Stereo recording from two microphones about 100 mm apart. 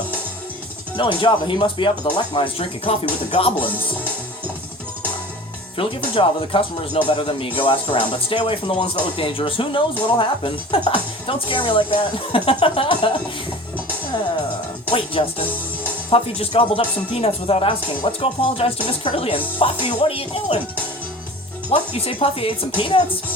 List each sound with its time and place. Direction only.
0.9 s a woman's voice: 55° left (ahead or behind)
5.7 s a woman's voice: 60° left (ahead or behind)
14.8 s a woman's voice: 60° left (ahead or behind)
21.7 s speech: 80° left
22.8 s a woman's voice: 60° left (ahead or behind)